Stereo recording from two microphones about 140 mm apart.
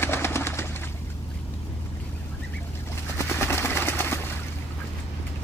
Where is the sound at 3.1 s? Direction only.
15° left (ahead or behind).